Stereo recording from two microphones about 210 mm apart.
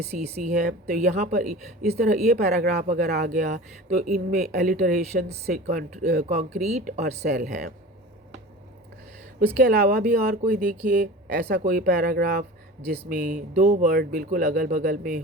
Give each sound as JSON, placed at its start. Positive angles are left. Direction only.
{"t": 0.0, "sound": "speech", "side_deg": -30}
{"t": 0.6, "sound": "speech", "side_deg": -45}
{"t": 5.6, "sound": "speech", "side_deg": -35}
{"t": 9.6, "sound": "speech", "side_deg": -45}